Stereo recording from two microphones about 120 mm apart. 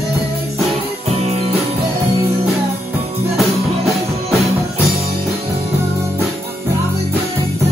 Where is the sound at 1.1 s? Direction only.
60° right (ahead or behind).